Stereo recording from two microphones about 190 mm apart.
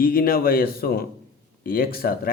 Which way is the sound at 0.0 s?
50° left (ahead or behind).